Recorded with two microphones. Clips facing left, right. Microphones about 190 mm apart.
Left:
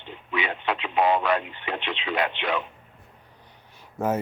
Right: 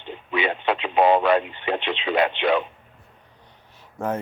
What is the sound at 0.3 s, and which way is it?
Radio, 30° right (ahead or behind).